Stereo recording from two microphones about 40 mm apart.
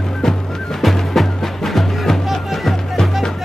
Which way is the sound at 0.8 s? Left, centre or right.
Centre.